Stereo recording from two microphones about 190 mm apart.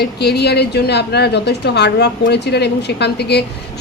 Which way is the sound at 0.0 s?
60° left (ahead or behind).